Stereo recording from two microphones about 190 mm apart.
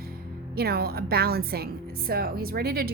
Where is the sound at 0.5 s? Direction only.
55° right (ahead or behind).